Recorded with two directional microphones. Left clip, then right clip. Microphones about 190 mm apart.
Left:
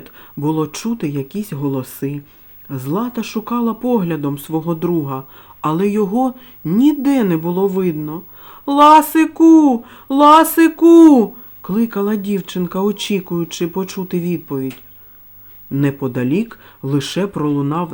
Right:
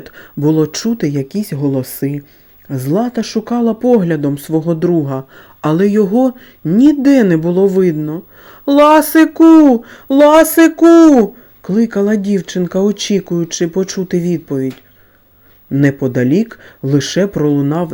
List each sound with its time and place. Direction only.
0.0 s speech: 25° right (ahead or behind)
10.8 s speech: centre (ahead or behind)
11.1 s speech: 15° right (ahead or behind)
15.7 s speech: 20° right (ahead or behind)